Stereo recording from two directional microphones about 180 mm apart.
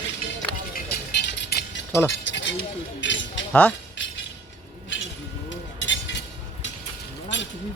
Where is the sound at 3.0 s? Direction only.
85° left.